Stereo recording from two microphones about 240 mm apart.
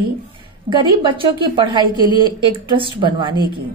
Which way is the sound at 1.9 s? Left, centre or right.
Centre.